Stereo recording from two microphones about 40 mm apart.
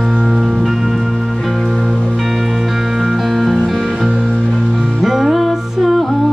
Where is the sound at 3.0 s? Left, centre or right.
Centre.